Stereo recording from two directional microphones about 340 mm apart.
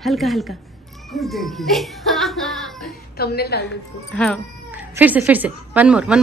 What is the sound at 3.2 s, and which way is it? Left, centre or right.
Speech, left.